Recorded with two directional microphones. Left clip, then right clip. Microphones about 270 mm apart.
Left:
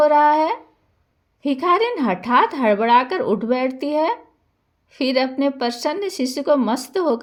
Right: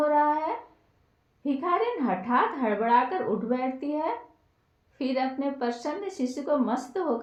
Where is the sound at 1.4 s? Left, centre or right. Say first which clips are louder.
Left 9 dB; left.